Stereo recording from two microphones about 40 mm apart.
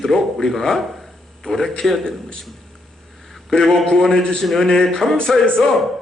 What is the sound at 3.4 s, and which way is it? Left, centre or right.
A man's voice, centre.